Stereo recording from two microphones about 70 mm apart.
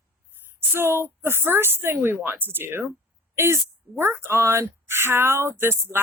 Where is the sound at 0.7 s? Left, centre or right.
Right.